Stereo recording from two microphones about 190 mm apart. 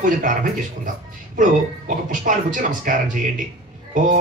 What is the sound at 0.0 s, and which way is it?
Speech, 45° right (ahead or behind).